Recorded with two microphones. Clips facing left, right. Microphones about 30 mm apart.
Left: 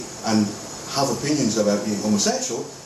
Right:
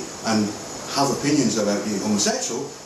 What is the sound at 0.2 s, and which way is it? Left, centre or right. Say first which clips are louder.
Speech: left 1 dB; centre.